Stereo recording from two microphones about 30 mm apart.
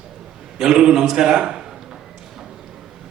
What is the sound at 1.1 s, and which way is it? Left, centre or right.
Speech, right.